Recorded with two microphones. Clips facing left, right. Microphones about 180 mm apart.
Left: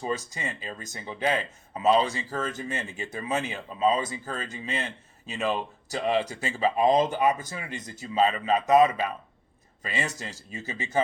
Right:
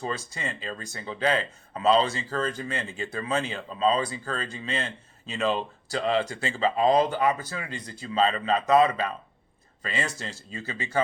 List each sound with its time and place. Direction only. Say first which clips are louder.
0.0 s speech: left 1 dB; 15° left (ahead or behind)